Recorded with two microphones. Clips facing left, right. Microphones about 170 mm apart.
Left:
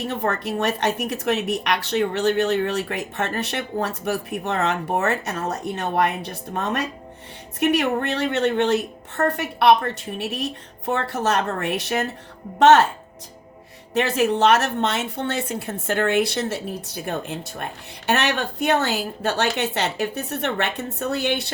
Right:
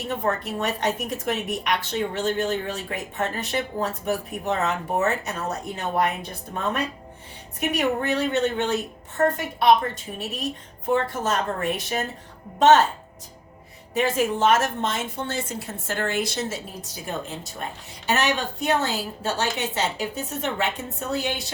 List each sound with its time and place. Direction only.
0.1 s a woman's voice: 75° left (ahead or behind)
13.9 s a woman's voice: 75° left (ahead or behind)